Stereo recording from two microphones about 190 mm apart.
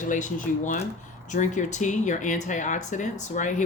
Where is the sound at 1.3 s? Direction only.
40° left (ahead or behind).